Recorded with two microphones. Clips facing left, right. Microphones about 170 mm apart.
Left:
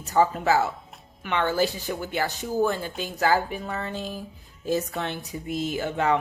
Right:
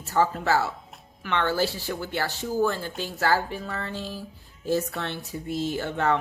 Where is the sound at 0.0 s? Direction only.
20° left (ahead or behind).